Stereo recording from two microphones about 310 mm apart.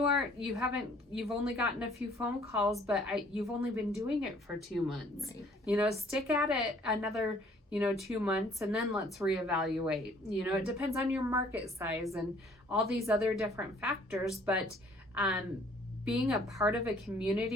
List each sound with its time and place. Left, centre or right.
0.0 s a woman's voice: centre